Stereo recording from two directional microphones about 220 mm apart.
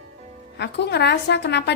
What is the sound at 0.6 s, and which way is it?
Speech, 50° left (ahead or behind).